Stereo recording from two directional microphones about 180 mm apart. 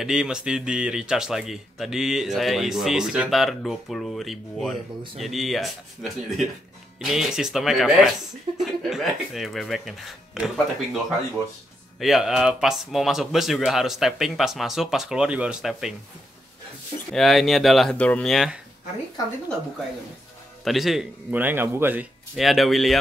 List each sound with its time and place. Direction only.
0.0 s speech: 5° right (ahead or behind)
12.0 s speech: centre (ahead or behind)
17.1 s speech: centre (ahead or behind)
20.6 s a man's voice: centre (ahead or behind)
22.4 s speech: centre (ahead or behind)